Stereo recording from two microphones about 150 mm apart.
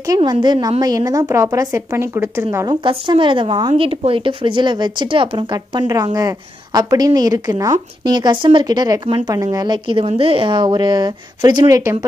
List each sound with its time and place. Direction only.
0.1 s a woman's voice: 30° right (ahead or behind)
2.7 s a woman's voice: 35° right (ahead or behind)